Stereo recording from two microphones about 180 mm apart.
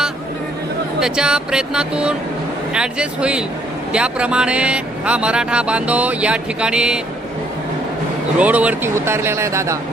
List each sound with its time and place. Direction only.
0.9 s speech: 5° right (ahead or behind)
8.4 s speech: 10° right (ahead or behind)